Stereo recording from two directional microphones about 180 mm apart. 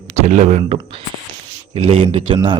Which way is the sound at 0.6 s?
30° right (ahead or behind).